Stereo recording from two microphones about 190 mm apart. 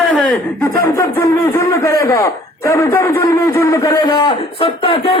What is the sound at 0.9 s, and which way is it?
A man's voice, 15° left (ahead or behind).